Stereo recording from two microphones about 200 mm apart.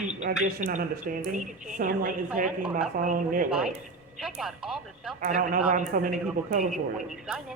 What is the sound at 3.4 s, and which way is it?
Speech, 5° right (ahead or behind).